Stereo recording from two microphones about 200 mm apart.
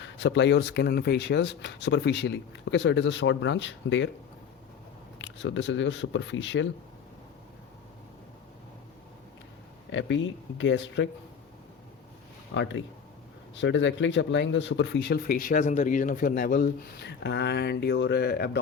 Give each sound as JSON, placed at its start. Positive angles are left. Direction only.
{"t": 0.0, "sound": "speech", "side_deg": 65}
{"t": 5.2, "sound": "speech", "side_deg": 65}
{"t": 9.9, "sound": "speech", "side_deg": 65}
{"t": 12.5, "sound": "speech", "side_deg": 65}